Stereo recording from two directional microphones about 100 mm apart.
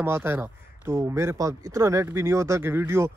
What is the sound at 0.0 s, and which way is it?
Speech, 25° right (ahead or behind).